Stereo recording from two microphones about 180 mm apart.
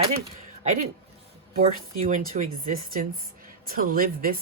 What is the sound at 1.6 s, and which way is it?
Speech, 35° right (ahead or behind).